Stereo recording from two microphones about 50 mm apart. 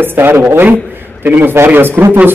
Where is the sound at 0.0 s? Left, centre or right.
Right.